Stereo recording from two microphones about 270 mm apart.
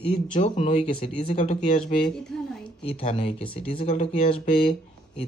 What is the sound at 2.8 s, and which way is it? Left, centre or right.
Speech, left.